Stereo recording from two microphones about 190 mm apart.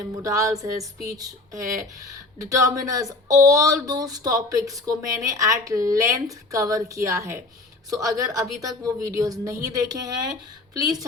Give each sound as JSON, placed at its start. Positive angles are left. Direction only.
{"t": 0.2, "sound": "speech", "side_deg": -15}